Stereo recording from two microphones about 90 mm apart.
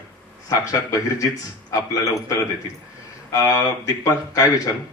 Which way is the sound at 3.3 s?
45° left (ahead or behind).